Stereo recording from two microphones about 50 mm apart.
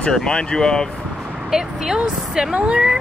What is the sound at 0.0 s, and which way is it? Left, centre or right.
Speech, centre.